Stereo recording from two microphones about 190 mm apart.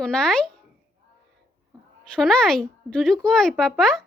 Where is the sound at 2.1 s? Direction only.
5° left (ahead or behind).